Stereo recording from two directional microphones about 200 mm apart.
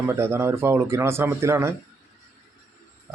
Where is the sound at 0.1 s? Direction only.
15° right (ahead or behind).